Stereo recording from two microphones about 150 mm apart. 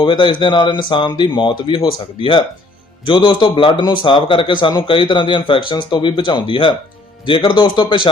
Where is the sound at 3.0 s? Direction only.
30° left (ahead or behind).